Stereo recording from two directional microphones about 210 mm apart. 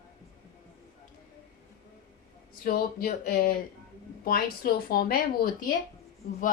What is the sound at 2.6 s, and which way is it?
Speech, 45° left (ahead or behind).